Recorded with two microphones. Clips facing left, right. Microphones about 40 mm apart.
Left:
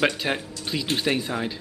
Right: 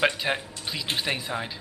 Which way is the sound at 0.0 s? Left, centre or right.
Centre.